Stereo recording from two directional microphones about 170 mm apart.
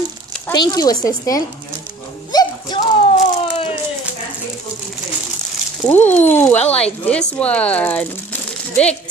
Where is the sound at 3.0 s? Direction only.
35° left (ahead or behind).